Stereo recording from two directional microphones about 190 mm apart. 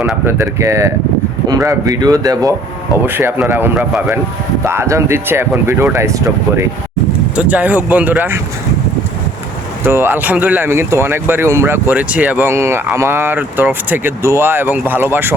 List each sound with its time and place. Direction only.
0.0 s speech: 10° right (ahead or behind)
9.8 s speech: 10° right (ahead or behind)